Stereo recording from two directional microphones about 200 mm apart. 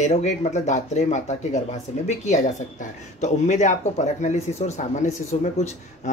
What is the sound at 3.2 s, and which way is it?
Speech, 35° left (ahead or behind).